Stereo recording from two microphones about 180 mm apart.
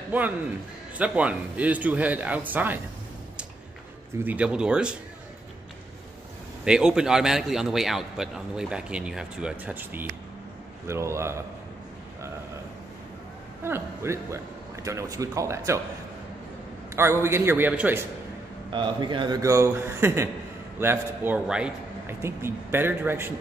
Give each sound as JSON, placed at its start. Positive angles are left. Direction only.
{"t": 0.9, "sound": "a man's voice", "side_deg": -5}
{"t": 4.2, "sound": "a man's voice", "side_deg": -10}
{"t": 6.6, "sound": "a man's voice", "side_deg": -5}
{"t": 13.7, "sound": "a man's voice", "side_deg": -15}
{"t": 16.9, "sound": "a man's voice", "side_deg": -15}
{"t": 18.7, "sound": "a man's voice", "side_deg": -25}